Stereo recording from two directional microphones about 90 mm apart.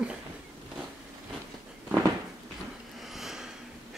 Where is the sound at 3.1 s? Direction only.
5° right (ahead or behind).